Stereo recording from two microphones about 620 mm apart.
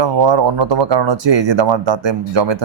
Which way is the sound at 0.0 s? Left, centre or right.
Right.